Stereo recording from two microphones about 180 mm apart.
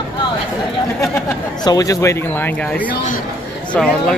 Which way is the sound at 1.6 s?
20° left (ahead or behind).